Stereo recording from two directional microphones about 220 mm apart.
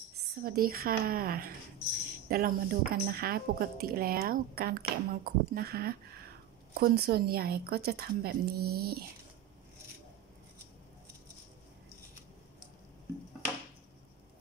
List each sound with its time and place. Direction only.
0.4 s speech: 45° right (ahead or behind)